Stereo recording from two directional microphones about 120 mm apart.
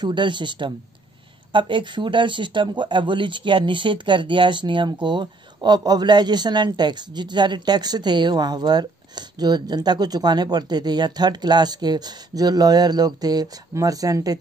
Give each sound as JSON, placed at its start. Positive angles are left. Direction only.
{"t": 0.0, "sound": "speech", "side_deg": -40}